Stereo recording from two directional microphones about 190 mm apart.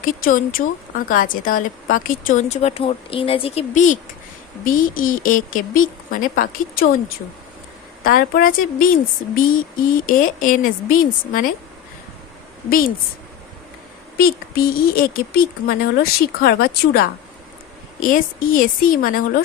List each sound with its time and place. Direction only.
0.0 s speech: 45° left (ahead or behind)
8.0 s speech: 50° left (ahead or behind)
14.2 s speech: 50° left (ahead or behind)